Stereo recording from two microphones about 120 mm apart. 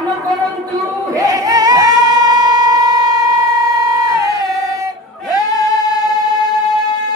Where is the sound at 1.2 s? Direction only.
30° right (ahead or behind).